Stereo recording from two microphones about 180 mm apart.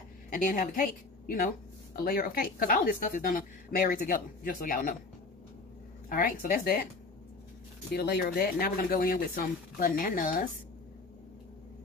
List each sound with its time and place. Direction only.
0.3 s a woman's voice: 45° left (ahead or behind)
6.0 s a woman's voice: 50° left (ahead or behind)
7.9 s a woman's voice: 65° left (ahead or behind)